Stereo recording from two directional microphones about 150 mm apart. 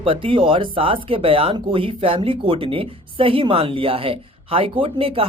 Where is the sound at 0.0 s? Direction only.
35° right (ahead or behind).